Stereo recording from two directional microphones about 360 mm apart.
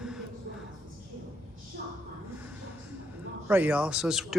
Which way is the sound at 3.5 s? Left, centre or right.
Centre.